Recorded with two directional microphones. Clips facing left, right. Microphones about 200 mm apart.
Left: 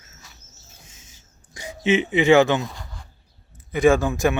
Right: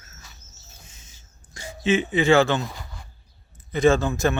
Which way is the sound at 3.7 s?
10° left (ahead or behind).